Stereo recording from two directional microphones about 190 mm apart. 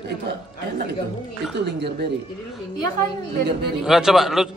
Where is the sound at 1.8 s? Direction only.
60° right (ahead or behind).